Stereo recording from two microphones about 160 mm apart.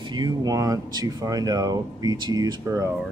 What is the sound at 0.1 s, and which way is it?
Speech, 25° right (ahead or behind).